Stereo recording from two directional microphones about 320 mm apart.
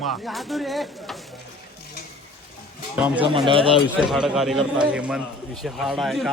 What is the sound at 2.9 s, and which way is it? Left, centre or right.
Speech, centre.